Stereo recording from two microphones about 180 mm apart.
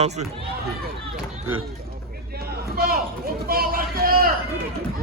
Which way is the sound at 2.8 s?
55° right (ahead or behind).